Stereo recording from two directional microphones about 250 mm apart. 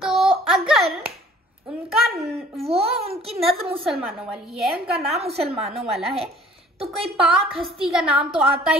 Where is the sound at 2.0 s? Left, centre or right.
Centre.